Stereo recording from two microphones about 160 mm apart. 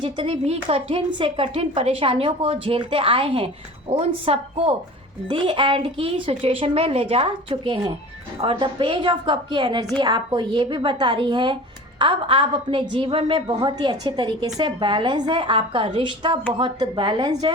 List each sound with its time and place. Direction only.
0.0 s a woman's voice: 35° right (ahead or behind)